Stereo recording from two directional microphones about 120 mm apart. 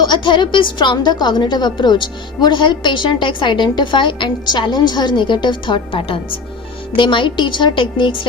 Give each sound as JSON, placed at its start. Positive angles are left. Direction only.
{"t": 0.0, "sound": "a woman's voice", "side_deg": 40}